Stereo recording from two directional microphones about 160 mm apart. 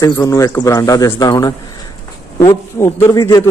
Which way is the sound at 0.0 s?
20° left (ahead or behind).